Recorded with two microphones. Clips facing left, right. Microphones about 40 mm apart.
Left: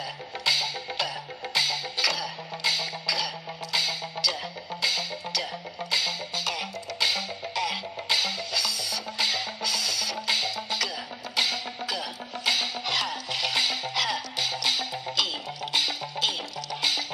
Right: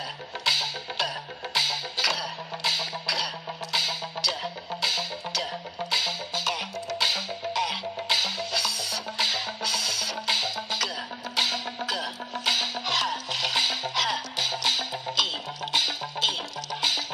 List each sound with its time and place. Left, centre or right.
0.5 s music: centre